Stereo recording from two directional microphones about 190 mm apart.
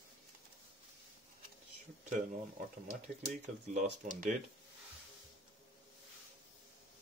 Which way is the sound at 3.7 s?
45° right (ahead or behind).